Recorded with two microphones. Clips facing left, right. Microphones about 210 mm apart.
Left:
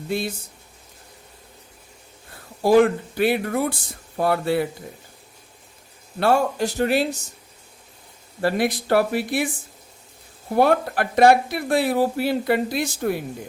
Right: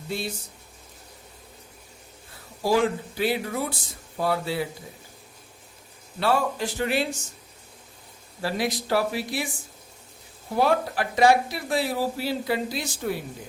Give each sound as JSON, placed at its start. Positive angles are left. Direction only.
{"t": 2.6, "sound": "speech", "side_deg": 55}
{"t": 6.1, "sound": "speech", "side_deg": 45}
{"t": 8.4, "sound": "speech", "side_deg": 60}
{"t": 10.5, "sound": "speech", "side_deg": 55}